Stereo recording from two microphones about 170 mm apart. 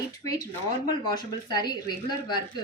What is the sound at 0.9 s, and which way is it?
A woman's voice, 25° left (ahead or behind).